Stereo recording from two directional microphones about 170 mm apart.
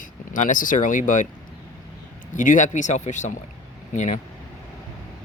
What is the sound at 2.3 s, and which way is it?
Speech, 50° left (ahead or behind).